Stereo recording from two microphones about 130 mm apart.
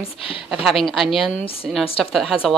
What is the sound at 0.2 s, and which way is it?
Speech, 45° left (ahead or behind).